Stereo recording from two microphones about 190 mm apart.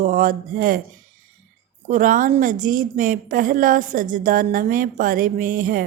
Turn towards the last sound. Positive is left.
turn(degrees=-45)  # may be behind; listen again after turning